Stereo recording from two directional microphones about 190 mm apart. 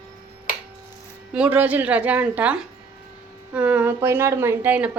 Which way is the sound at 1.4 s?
10° right (ahead or behind).